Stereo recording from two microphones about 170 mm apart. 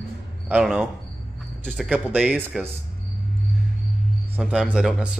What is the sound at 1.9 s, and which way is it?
Speech, 10° right (ahead or behind).